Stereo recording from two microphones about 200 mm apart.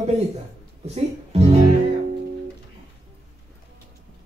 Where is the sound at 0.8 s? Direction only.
30° right (ahead or behind).